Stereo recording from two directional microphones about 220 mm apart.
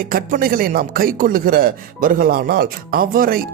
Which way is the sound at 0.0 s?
40° right (ahead or behind).